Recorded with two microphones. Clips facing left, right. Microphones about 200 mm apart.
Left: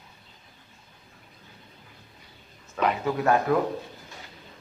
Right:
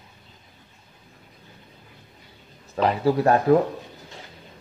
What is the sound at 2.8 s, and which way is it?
Speech, 35° right (ahead or behind).